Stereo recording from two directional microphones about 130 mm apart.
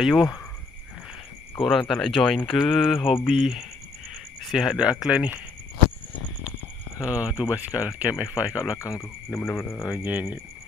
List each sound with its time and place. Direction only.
0.0 s speech: centre (ahead or behind)
1.6 s speech: centre (ahead or behind)
7.0 s speech: 10° right (ahead or behind)
8.7 s speech: 25° left (ahead or behind)
9.9 s speech: 15° right (ahead or behind)